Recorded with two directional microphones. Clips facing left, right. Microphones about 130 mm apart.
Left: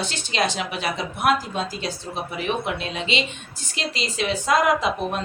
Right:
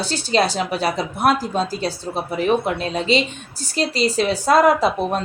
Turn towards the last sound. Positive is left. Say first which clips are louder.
# right 4 dB
turn(degrees=-35)  # may be behind; listen again after turning